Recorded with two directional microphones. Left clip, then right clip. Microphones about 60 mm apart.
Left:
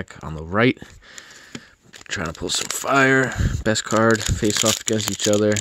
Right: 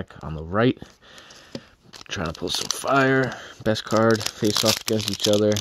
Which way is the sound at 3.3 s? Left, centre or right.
Left.